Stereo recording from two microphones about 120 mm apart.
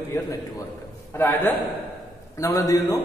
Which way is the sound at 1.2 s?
15° left (ahead or behind).